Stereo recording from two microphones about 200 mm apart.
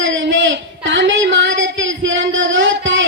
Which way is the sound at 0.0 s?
70° right (ahead or behind).